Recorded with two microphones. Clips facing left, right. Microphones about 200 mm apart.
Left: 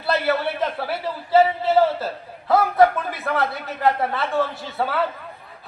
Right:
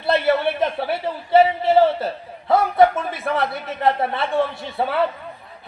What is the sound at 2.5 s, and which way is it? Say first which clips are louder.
A man's voice: right 1 dB; 25° right (ahead or behind).